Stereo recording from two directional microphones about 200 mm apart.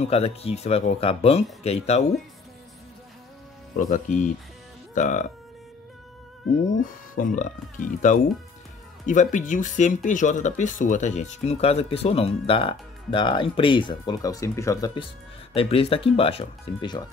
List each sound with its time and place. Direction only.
0.0 s speech: 30° left (ahead or behind)
3.7 s speech: 40° left (ahead or behind)
6.8 s speech: 40° left (ahead or behind); by 15.0 s 15° left (ahead or behind)
15.5 s speech: 30° left (ahead or behind)